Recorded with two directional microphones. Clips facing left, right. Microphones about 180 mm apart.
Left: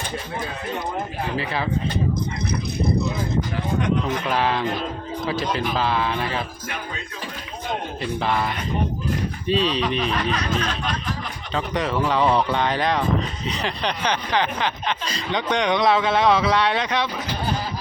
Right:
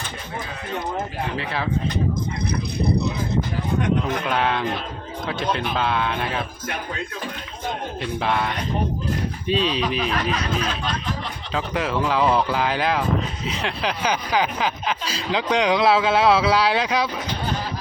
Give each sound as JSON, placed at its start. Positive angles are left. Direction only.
{"t": 2.5, "sound": "speech", "side_deg": -65}
{"t": 4.3, "sound": "speech", "side_deg": 0}
{"t": 8.0, "sound": "speech", "side_deg": 0}